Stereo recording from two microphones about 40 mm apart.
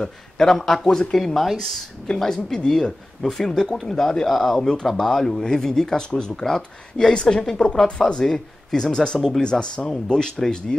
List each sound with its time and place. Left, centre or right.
0.0 s speech: centre
4.6 s speech: centre